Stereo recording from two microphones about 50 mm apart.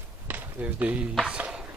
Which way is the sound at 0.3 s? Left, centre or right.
Right.